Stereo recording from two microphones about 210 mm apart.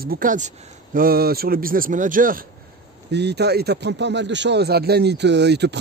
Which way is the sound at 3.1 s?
55° right (ahead or behind).